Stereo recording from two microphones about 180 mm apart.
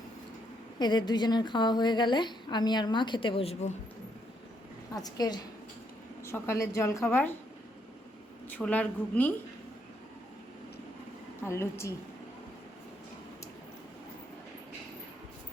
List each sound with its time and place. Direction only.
0.8 s a woman's voice: 25° left (ahead or behind)
4.9 s a woman's voice: 20° left (ahead or behind)
8.5 s a woman's voice: 5° left (ahead or behind)
11.4 s a woman's voice: 15° left (ahead or behind)